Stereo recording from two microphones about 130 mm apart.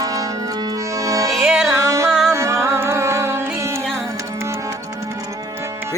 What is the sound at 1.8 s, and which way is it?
Music, 25° right (ahead or behind).